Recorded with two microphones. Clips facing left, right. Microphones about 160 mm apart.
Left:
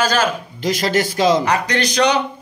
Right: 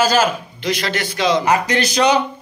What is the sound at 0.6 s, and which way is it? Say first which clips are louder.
Speech: left 4 dB; 45° left (ahead or behind).